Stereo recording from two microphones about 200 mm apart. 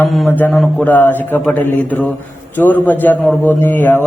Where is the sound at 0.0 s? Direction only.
5° left (ahead or behind).